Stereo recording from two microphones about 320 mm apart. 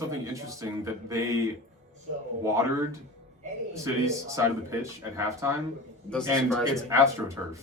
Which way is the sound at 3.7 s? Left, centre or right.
Centre.